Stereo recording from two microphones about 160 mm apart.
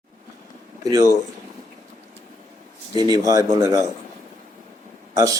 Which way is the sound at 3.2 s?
20° right (ahead or behind).